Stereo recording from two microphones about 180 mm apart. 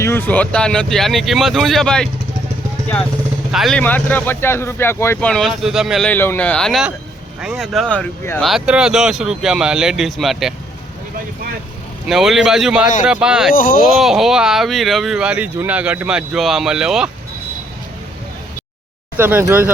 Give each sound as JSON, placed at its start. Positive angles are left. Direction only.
{"t": 0.0, "sound": "speech", "side_deg": 15}
{"t": 3.5, "sound": "speech", "side_deg": 0}
{"t": 8.4, "sound": "speech", "side_deg": -5}
{"t": 12.0, "sound": "speech", "side_deg": 0}
{"t": 13.5, "sound": "speech", "side_deg": 50}
{"t": 14.0, "sound": "speech", "side_deg": 0}
{"t": 19.1, "sound": "speech", "side_deg": -10}